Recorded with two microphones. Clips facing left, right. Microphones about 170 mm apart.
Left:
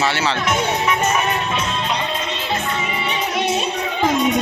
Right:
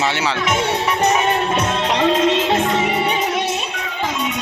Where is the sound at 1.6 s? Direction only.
65° right (ahead or behind).